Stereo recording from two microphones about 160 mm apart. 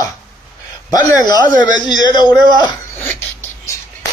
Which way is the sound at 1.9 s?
25° left (ahead or behind).